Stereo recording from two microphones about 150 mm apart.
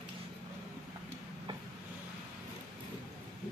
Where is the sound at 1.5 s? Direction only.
35° right (ahead or behind).